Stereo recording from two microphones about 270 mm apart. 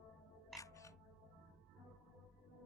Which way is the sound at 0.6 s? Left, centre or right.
Centre.